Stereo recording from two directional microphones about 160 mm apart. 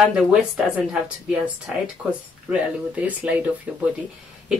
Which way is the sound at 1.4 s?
5° right (ahead or behind).